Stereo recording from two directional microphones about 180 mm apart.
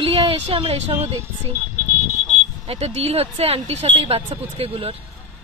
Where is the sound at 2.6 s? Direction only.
35° right (ahead or behind).